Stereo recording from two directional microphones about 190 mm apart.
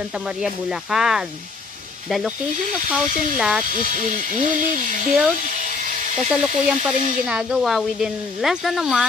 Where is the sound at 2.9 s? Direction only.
Centre (ahead or behind).